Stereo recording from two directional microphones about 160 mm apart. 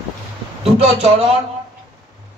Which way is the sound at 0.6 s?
40° right (ahead or behind).